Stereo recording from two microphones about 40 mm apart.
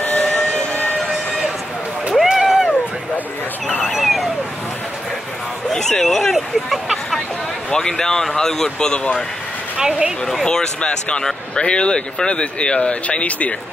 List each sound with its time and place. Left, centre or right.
0.0 s vehicle: left
2.3 s a sound: centre
3.8 s vehicle: centre
5.7 s a sound: centre
6.0 s speech: centre
7.7 s speech: centre
8.6 s speech: left
9.8 s speech: right
10.4 s speech: centre